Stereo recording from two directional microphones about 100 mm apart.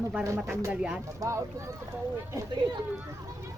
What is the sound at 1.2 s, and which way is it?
Speech, 30° right (ahead or behind).